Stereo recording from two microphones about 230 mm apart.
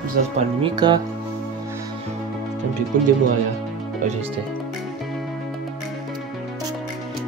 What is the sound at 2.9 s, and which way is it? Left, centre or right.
Speech, right.